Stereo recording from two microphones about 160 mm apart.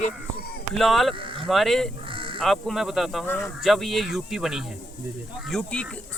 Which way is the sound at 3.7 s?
Centre (ahead or behind).